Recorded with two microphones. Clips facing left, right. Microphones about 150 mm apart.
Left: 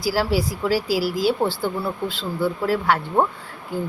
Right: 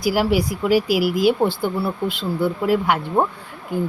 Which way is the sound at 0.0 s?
15° right (ahead or behind).